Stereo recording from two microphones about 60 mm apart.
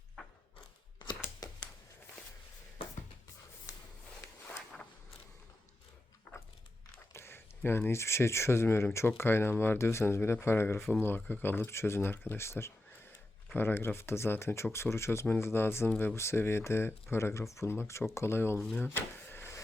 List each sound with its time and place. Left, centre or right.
1.4 s a sound: left
6.3 s a sound: left
7.1 s speech: left
10.8 s speech: centre
11.0 s speech: left
18.8 s drawer open or close: left